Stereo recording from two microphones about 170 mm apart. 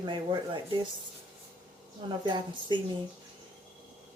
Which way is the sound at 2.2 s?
25° right (ahead or behind).